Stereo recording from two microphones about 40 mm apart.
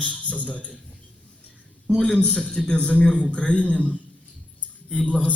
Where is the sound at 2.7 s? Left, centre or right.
Left.